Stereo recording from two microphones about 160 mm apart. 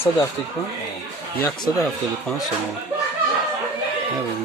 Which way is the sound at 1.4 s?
20° left (ahead or behind).